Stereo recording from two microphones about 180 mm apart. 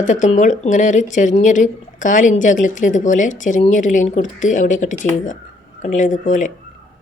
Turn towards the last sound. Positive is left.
turn(degrees=45)  # may be behind; listen again after turning